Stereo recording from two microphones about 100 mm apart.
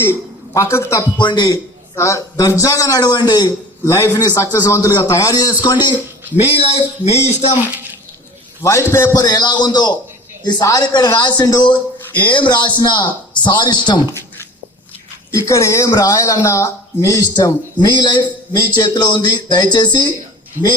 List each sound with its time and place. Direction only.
0.0 s a man's voice: 25° left (ahead or behind)
1.2 s speech: 45° left (ahead or behind)
2.0 s speech: 30° left (ahead or behind)
3.8 s speech: 35° left (ahead or behind)
6.4 s speech: 80° left
8.6 s a man's voice: 25° left (ahead or behind)
9.1 s speech: 40° left (ahead or behind)
15.3 s speech: 30° left (ahead or behind)